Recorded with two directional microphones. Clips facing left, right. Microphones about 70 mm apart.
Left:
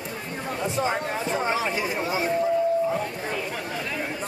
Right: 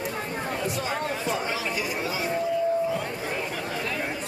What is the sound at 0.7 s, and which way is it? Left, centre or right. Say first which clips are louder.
Chatter: left 3 dB; left.